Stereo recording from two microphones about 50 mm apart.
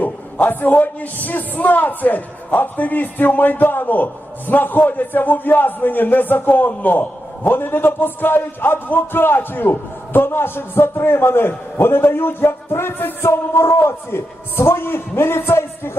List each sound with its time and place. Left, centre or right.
0.3 s a man's voice: left
13.2 s a man's voice: left